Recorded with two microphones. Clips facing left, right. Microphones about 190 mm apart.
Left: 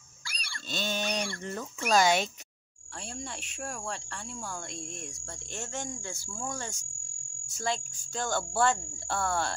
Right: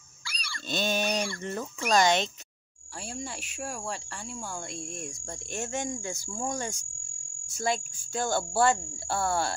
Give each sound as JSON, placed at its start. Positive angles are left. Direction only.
{"t": 0.3, "sound": "pig", "side_deg": 55}
{"t": 0.7, "sound": "a sound", "side_deg": -15}
{"t": 3.2, "sound": "cricket", "side_deg": 0}
{"t": 5.1, "sound": "cricket", "side_deg": -15}